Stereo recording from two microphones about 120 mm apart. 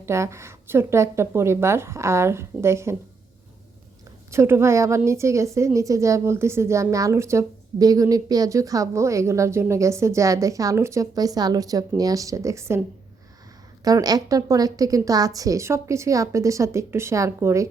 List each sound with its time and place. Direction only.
0.0 s a woman's voice: 25° right (ahead or behind)
4.3 s a woman's voice: 20° right (ahead or behind)
13.8 s a woman's voice: 30° right (ahead or behind)